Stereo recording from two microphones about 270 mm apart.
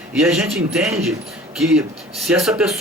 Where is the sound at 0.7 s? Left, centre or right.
Centre.